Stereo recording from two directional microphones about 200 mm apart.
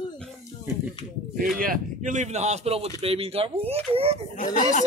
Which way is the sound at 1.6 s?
40° right (ahead or behind).